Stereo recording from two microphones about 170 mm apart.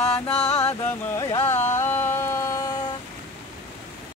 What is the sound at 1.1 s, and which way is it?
Music, 20° left (ahead or behind).